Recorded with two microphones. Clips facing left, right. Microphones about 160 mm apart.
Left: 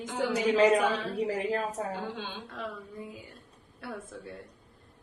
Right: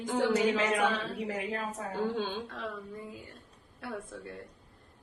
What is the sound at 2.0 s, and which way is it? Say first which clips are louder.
Speech: right 6 dB; 45° right (ahead or behind).